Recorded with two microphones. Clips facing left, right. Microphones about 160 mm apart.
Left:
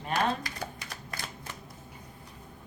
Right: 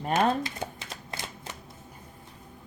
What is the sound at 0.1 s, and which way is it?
Typewriter, 25° right (ahead or behind).